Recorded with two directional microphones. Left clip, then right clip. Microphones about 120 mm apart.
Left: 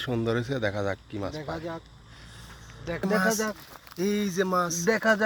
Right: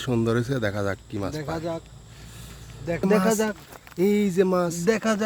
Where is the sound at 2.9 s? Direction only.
15° right (ahead or behind).